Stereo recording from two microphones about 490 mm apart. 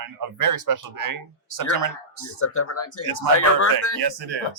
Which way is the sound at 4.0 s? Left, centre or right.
Right.